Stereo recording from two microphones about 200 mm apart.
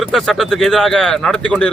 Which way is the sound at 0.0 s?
Centre (ahead or behind).